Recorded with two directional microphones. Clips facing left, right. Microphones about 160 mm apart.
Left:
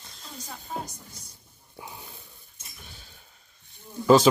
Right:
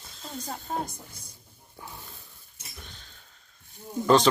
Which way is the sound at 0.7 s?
45° right (ahead or behind).